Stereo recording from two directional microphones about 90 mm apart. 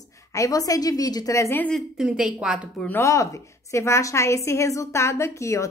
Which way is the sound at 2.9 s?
35° left (ahead or behind).